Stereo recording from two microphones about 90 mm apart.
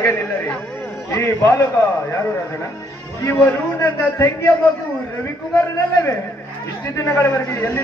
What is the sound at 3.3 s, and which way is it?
A man's voice, 25° left (ahead or behind).